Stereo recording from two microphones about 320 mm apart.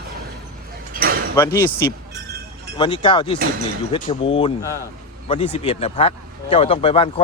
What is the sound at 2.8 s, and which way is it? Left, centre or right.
Speech, centre.